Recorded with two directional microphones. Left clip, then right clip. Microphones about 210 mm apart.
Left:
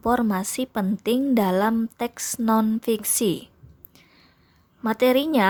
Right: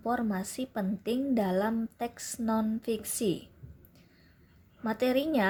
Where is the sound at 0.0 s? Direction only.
30° left (ahead or behind).